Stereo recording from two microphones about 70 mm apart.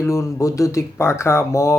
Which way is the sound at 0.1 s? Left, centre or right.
Left.